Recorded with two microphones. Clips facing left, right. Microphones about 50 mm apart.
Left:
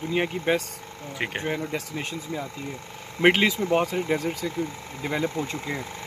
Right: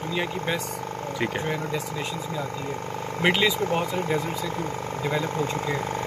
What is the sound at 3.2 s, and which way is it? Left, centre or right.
Speech, left.